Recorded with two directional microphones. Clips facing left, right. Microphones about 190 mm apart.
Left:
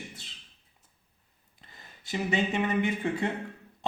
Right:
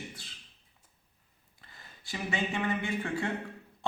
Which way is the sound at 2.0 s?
20° left (ahead or behind).